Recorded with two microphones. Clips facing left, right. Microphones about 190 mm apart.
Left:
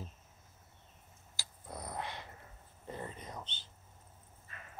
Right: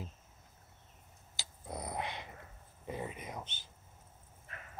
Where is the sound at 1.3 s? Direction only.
20° right (ahead or behind).